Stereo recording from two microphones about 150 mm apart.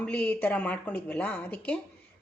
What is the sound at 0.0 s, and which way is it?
A woman's voice, 10° left (ahead or behind).